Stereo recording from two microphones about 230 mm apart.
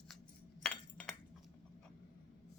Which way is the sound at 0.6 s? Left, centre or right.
Centre.